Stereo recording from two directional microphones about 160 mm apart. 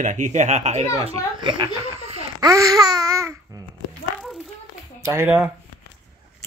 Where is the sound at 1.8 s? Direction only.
40° right (ahead or behind).